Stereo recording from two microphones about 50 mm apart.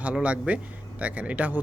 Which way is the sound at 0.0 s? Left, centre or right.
Right.